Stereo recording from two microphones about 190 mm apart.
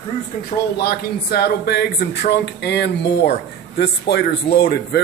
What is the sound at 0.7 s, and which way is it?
Speech, 55° left (ahead or behind).